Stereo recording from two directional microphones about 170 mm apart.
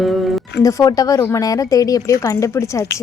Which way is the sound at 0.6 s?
20° left (ahead or behind).